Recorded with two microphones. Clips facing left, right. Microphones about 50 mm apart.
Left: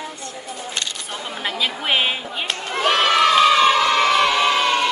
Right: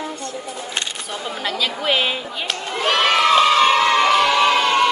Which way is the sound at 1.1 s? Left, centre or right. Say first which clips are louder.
Right 2 dB; centre.